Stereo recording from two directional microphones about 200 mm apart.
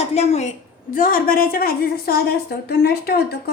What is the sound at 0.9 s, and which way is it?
A woman's voice, 45° left (ahead or behind).